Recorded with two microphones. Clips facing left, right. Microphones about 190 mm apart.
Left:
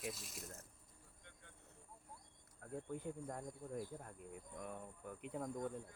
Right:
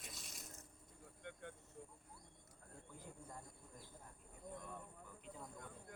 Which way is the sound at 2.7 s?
65° left (ahead or behind).